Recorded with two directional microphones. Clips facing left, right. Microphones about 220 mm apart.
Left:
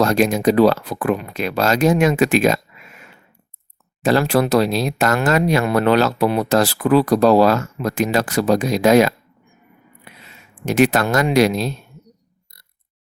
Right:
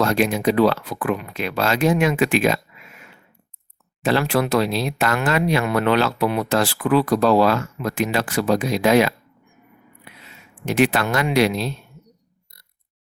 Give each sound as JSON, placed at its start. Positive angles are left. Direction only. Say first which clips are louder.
{"t": 0.0, "sound": "speech", "louder": "left 3 dB", "side_deg": 40}
{"t": 4.0, "sound": "speech", "louder": "left 3 dB", "side_deg": 40}
{"t": 10.7, "sound": "speech", "louder": "left 3 dB", "side_deg": 45}